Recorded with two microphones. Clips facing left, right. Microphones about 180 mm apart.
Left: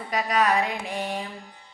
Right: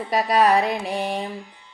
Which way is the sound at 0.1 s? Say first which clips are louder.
Right 5 dB; 35° right (ahead or behind).